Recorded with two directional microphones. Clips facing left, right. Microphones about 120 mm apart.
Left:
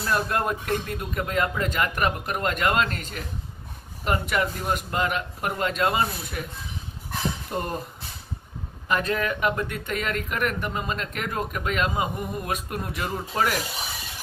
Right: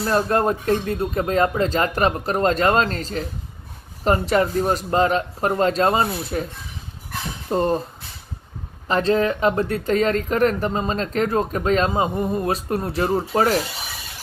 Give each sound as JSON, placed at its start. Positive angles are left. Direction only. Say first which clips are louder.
{"t": 0.0, "sound": "speech", "louder": "right 6 dB", "side_deg": -35}
{"t": 7.4, "sound": "speech", "louder": "right 9 dB", "side_deg": -30}
{"t": 8.8, "sound": "speech", "louder": "right 7 dB", "side_deg": -30}